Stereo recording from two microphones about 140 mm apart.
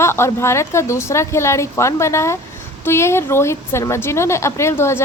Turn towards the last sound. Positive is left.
turn(degrees=20)  # may be behind; listen again after turning